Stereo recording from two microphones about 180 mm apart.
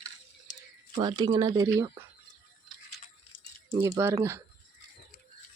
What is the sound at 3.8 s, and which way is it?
Speech, 15° right (ahead or behind).